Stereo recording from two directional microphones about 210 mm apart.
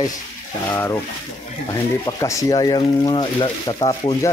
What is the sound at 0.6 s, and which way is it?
Speech, 10° left (ahead or behind).